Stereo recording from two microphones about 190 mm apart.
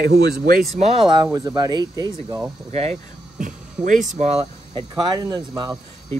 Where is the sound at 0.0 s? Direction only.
55° right (ahead or behind).